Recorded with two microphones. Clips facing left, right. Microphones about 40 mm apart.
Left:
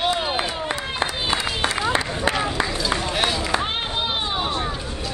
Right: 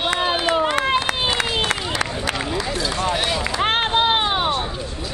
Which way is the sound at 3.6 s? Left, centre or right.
Right.